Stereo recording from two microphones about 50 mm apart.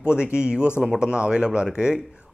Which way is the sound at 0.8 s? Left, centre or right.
Centre.